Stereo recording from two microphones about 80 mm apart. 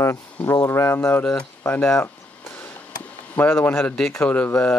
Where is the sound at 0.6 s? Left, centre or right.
Left.